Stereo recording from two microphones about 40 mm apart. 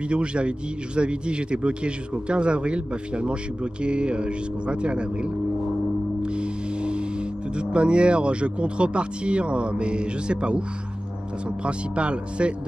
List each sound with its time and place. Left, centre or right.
0.1 s a man's voice: right
6.2 s music: right
7.5 s a man's voice: right
11.6 s a man's voice: right